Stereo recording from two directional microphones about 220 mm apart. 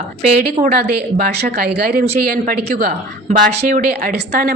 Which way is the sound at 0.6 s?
40° right (ahead or behind).